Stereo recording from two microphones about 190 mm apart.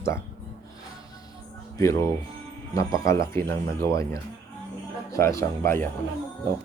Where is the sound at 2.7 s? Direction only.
15° left (ahead or behind).